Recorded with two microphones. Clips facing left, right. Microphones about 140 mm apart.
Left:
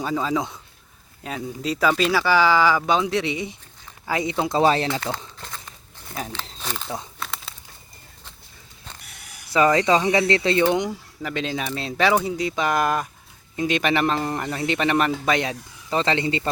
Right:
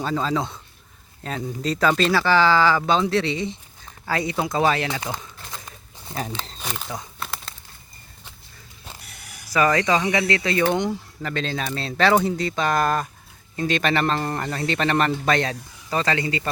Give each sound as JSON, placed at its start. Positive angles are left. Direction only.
{"t": 0.0, "sound": "speech", "side_deg": 10}
{"t": 5.1, "sound": "speech", "side_deg": 10}
{"t": 6.6, "sound": "speech", "side_deg": -5}
{"t": 7.2, "sound": "a sound", "side_deg": 0}
{"t": 9.5, "sound": "speech", "side_deg": 25}
{"t": 11.2, "sound": "speech", "side_deg": 10}